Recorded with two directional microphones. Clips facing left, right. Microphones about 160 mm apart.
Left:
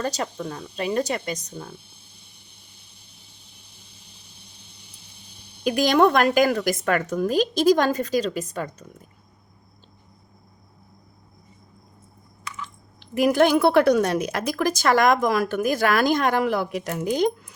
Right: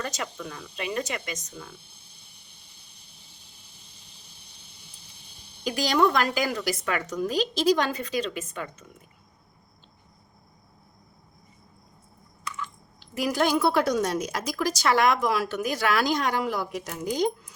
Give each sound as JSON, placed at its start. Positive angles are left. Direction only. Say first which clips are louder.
{"t": 0.0, "sound": "speech", "louder": "left 6 dB", "side_deg": 35}
{"t": 5.6, "sound": "a woman's voice", "louder": "left 5 dB", "side_deg": 55}
{"t": 13.1, "sound": "a woman's voice", "louder": "left 6 dB", "side_deg": 55}